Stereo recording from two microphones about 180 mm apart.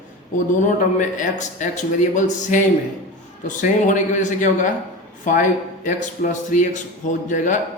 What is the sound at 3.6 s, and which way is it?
Speech, 45° left (ahead or behind).